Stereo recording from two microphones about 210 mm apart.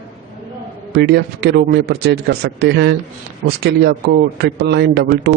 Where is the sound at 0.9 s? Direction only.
50° right (ahead or behind).